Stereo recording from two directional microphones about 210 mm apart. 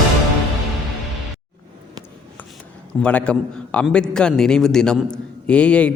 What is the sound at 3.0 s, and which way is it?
Speech, 5° left (ahead or behind).